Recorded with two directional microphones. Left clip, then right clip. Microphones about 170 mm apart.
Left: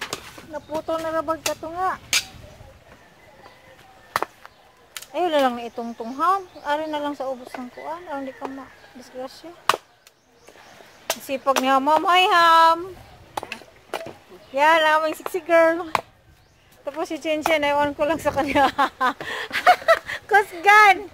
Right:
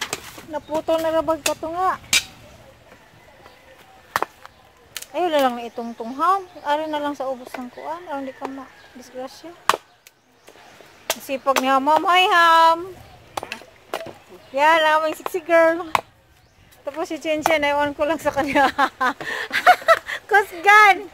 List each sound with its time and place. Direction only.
0.8 s speech: 35° right (ahead or behind)
5.1 s speech: centre (ahead or behind)
11.2 s speech: centre (ahead or behind)
13.5 s a sound: 20° right (ahead or behind)
14.5 s a woman's voice: centre (ahead or behind)